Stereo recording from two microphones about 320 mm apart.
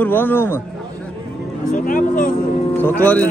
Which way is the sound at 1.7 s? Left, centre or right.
Left.